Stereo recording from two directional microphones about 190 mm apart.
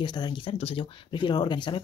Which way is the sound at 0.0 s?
25° left (ahead or behind).